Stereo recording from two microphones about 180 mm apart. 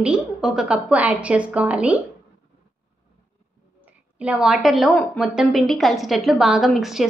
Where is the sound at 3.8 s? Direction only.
10° right (ahead or behind).